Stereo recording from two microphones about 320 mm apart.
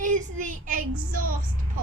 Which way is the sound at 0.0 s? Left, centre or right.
Right.